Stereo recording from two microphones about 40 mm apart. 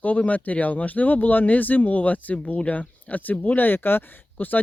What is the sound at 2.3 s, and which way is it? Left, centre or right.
Speech, left.